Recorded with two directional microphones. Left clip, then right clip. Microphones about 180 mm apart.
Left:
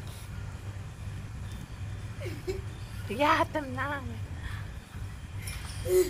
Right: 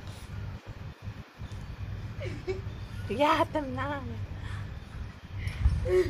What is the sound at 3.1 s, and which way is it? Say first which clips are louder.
Speech: even; 10° right (ahead or behind).